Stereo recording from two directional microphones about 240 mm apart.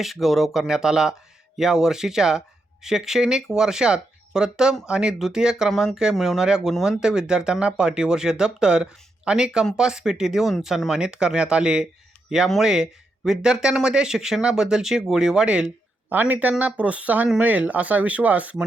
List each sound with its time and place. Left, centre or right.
0.0 s speech: centre